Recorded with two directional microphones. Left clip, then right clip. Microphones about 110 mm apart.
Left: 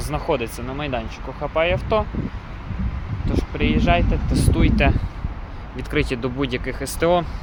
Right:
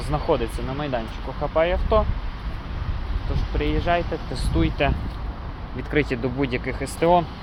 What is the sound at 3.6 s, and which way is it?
Speech, 35° left (ahead or behind).